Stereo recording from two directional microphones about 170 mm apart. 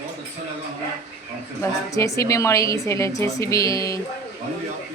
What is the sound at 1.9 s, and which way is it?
A woman's voice, 20° left (ahead or behind).